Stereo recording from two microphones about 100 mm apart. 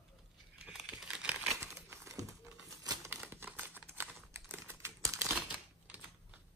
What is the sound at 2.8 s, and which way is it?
Crumpling, 35° right (ahead or behind).